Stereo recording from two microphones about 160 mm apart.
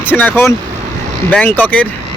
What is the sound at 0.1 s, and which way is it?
Speech, 10° left (ahead or behind).